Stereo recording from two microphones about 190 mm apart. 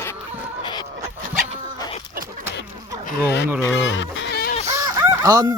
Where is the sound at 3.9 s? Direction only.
75° left (ahead or behind).